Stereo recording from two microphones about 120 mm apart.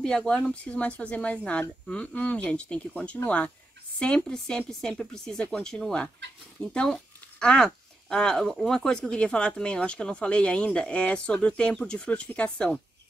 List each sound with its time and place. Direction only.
0.0 s a woman's voice: 5° left (ahead or behind)